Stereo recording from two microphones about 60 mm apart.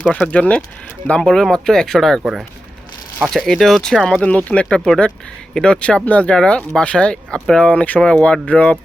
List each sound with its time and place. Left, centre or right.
0.3 s speech: left; by 2.2 s centre
3.2 s speech: centre
4.2 s speech: left